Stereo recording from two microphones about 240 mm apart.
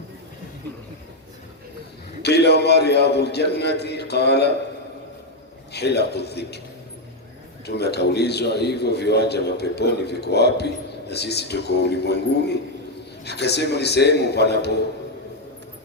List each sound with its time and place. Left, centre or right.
2.2 s a man's voice: left
5.7 s a man's voice: left
7.7 s a man's voice: left
13.2 s a man's voice: left